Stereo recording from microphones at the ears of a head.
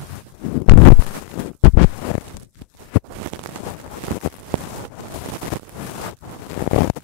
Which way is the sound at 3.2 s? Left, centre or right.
Right.